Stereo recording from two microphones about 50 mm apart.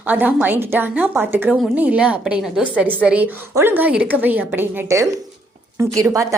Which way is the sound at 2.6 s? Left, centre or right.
Right.